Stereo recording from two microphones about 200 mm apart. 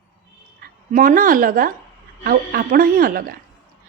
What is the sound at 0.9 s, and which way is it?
A woman's voice, 45° right (ahead or behind).